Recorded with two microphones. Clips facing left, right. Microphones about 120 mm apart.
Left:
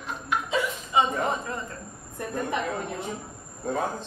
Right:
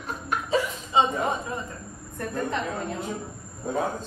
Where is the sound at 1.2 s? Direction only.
15° right (ahead or behind).